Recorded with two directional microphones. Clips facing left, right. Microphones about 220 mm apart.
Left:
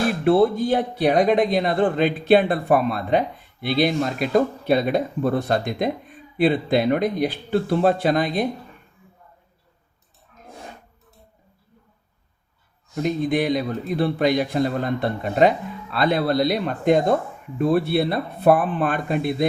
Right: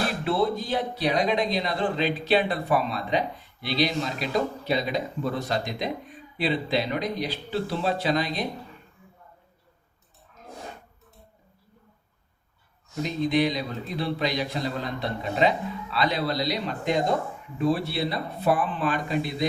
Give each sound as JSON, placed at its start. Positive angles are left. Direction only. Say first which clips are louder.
{"t": 0.3, "sound": "speech", "louder": "left 9 dB", "side_deg": 55}
{"t": 13.0, "sound": "speech", "louder": "left 3 dB", "side_deg": 55}